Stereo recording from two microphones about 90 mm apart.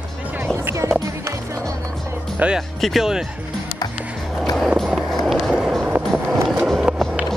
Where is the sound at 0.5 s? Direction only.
30° right (ahead or behind).